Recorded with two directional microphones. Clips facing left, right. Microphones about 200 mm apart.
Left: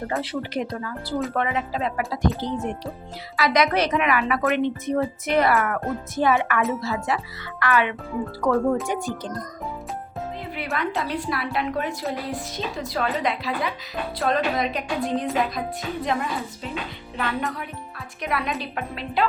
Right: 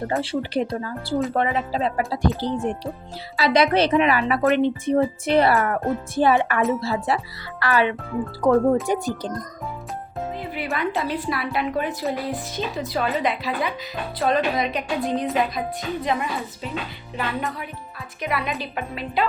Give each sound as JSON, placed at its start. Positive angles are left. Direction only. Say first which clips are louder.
{"t": 0.2, "sound": "speech", "louder": "right 3 dB", "side_deg": -30}
{"t": 10.4, "sound": "a woman's voice", "louder": "right 1 dB", "side_deg": 0}